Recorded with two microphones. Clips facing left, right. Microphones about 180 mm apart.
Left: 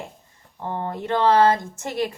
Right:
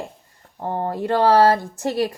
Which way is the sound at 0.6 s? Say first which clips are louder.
Right 4 dB; 40° right (ahead or behind).